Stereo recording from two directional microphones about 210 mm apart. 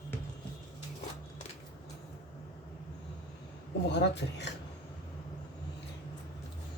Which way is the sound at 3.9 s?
55° left (ahead or behind).